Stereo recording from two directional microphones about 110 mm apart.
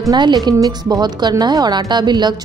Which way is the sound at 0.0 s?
40° right (ahead or behind).